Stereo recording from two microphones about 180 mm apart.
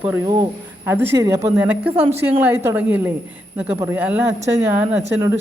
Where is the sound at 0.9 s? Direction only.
10° right (ahead or behind).